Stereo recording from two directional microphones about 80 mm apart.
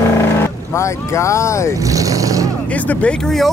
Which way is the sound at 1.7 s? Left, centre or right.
Right.